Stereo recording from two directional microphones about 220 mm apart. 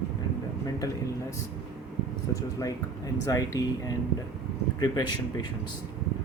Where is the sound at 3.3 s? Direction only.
15° left (ahead or behind).